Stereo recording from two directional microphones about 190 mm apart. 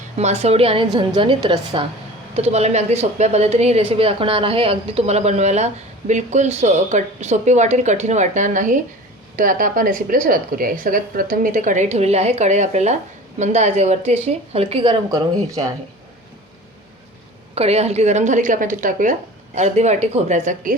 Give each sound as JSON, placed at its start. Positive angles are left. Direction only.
{"t": 0.2, "sound": "a woman's voice", "side_deg": -35}
{"t": 15.1, "sound": "speech", "side_deg": -15}
{"t": 17.5, "sound": "a woman's voice", "side_deg": -35}